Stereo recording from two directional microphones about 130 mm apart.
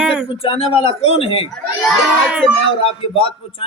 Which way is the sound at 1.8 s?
10° right (ahead or behind).